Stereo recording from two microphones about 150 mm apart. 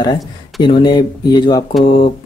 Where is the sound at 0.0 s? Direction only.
30° left (ahead or behind).